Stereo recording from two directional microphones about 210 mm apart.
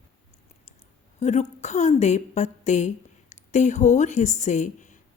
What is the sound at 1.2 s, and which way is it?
A woman's voice, 35° left (ahead or behind).